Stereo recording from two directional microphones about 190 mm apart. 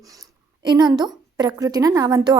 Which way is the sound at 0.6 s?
20° right (ahead or behind).